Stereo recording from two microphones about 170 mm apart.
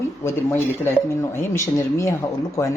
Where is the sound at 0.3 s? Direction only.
15° left (ahead or behind).